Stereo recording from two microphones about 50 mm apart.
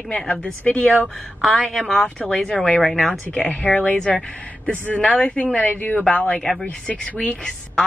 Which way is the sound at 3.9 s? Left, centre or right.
Centre.